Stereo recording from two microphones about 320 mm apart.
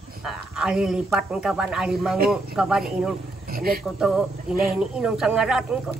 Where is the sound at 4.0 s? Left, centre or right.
Centre.